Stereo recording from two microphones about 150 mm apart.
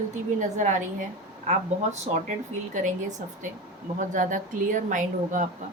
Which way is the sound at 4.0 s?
60° right (ahead or behind).